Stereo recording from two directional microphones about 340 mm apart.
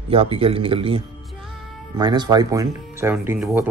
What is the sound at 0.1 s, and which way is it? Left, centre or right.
A man's voice, centre.